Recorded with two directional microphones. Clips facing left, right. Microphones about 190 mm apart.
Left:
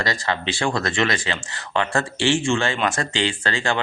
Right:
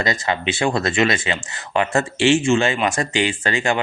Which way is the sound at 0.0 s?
20° right (ahead or behind).